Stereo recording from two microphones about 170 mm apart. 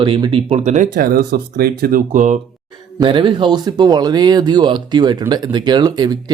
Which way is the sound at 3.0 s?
30° right (ahead or behind).